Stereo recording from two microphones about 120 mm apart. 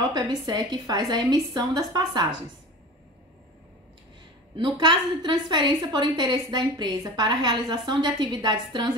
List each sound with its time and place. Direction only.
0.1 s a woman's voice: 35° right (ahead or behind)
4.6 s a woman's voice: 40° right (ahead or behind)